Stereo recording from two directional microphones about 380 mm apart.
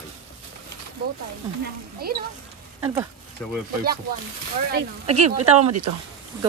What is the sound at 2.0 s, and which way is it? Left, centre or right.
Speech, right.